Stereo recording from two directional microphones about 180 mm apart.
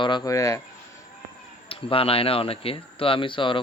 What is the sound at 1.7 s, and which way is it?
Speech, 30° left (ahead or behind).